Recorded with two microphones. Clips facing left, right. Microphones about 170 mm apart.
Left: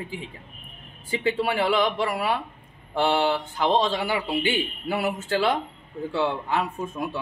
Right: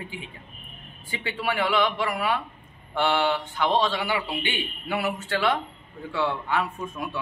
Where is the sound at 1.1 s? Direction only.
35° left (ahead or behind).